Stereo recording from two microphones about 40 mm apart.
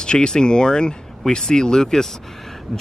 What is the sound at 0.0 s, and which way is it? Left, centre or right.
Speech, left.